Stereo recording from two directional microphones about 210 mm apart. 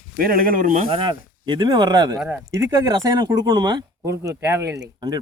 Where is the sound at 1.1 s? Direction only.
20° right (ahead or behind).